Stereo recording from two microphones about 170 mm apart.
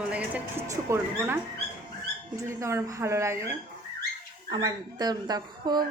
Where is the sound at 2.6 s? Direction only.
15° right (ahead or behind).